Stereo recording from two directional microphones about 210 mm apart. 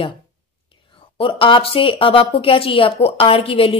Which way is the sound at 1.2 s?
25° left (ahead or behind).